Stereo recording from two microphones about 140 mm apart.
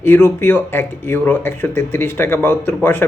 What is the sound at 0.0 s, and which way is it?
Speech, 15° left (ahead or behind).